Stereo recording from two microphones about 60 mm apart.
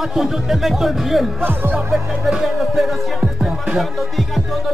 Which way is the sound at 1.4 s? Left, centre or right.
Right.